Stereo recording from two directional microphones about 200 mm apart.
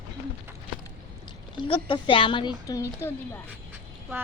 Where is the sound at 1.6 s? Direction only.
25° left (ahead or behind).